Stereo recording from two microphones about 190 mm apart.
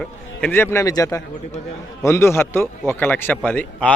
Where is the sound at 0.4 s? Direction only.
10° left (ahead or behind).